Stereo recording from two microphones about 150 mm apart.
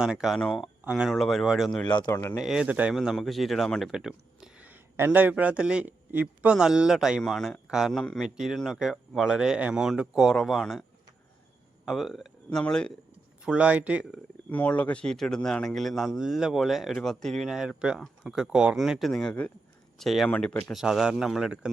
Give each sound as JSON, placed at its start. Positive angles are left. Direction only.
{"t": 0.0, "sound": "speech", "side_deg": -5}
{"t": 1.9, "sound": "speech", "side_deg": 30}
{"t": 2.4, "sound": "speech", "side_deg": -5}
{"t": 11.9, "sound": "speech", "side_deg": 0}
{"t": 13.4, "sound": "speech", "side_deg": -5}
{"t": 14.5, "sound": "speech", "side_deg": 10}